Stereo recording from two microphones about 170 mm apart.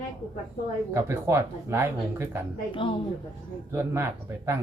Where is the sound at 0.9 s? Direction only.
15° right (ahead or behind).